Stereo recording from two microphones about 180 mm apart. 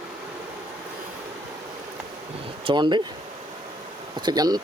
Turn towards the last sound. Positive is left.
turn(degrees=-20)  # may be behind; listen again after turning